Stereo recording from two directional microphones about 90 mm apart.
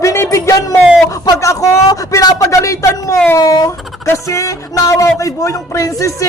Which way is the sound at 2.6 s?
35° left (ahead or behind).